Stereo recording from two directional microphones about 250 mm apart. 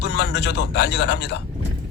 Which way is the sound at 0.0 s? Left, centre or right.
Left.